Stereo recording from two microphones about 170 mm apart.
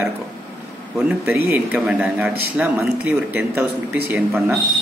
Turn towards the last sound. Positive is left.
turn(degrees=-15)  # may be behind; listen again after turning